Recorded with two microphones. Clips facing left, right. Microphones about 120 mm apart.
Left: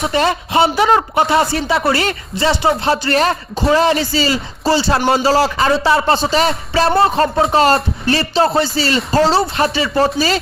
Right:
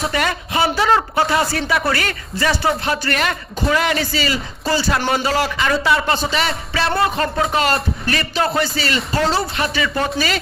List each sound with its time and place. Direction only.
0.1 s speech: 25° left (ahead or behind)